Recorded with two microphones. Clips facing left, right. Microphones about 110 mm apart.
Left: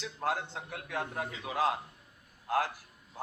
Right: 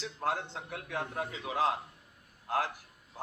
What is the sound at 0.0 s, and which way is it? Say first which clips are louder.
A man's voice: even; 40° left (ahead or behind).